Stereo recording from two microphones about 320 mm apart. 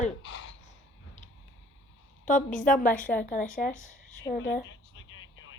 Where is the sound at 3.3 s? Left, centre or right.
Left.